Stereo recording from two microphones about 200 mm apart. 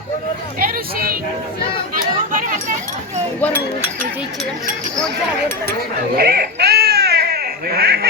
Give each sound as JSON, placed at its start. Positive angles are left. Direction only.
{"t": 0.6, "sound": "speech", "side_deg": -50}
{"t": 2.0, "sound": "chatter", "side_deg": -40}
{"t": 4.9, "sound": "speech", "side_deg": 5}
{"t": 6.1, "sound": "baby cry", "side_deg": -50}